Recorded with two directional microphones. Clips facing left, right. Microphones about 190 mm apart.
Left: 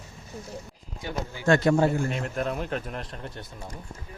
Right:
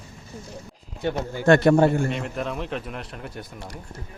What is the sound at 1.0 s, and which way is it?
A man's voice, 60° right (ahead or behind).